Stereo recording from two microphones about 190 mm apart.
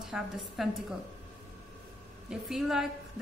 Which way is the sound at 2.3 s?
Centre (ahead or behind).